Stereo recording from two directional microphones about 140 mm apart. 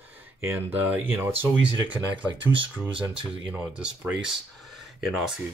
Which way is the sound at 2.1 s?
35° right (ahead or behind).